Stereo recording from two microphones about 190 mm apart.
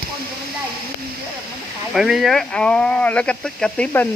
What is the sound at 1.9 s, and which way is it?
Speech, centre (ahead or behind).